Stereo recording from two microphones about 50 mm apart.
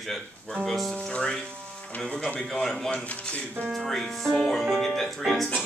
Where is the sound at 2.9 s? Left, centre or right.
Left.